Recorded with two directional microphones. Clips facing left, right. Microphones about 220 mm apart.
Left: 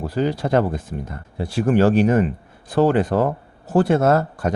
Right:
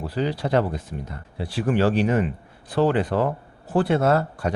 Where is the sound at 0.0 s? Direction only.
45° left (ahead or behind).